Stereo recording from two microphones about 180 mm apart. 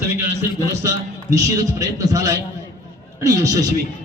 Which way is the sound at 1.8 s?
20° right (ahead or behind).